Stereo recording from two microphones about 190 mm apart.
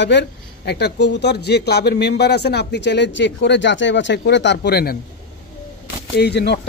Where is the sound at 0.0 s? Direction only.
65° left (ahead or behind).